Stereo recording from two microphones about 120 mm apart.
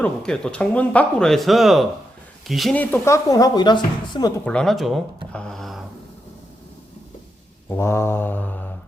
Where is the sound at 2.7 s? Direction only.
20° left (ahead or behind); by 3.8 s 35° left (ahead or behind).